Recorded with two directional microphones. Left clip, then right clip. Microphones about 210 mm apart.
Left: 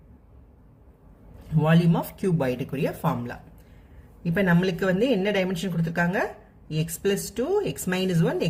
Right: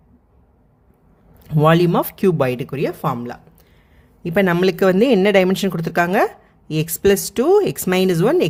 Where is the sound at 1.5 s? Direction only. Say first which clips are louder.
Right 10 dB; 50° right (ahead or behind).